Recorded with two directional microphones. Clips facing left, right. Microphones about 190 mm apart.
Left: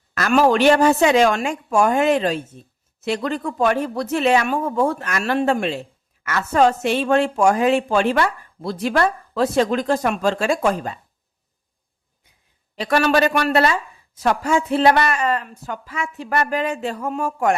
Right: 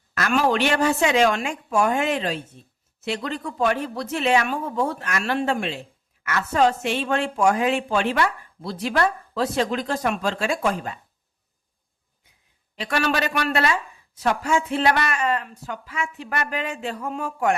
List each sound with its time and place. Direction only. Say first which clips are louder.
0.1 s a woman's voice: left 5 dB; 40° left (ahead or behind)
12.7 s a woman's voice: left 6 dB; 40° left (ahead or behind)